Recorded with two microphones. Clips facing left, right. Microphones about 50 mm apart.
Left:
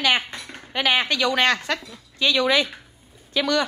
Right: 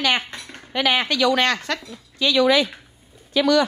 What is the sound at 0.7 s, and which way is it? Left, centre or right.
Speech, left.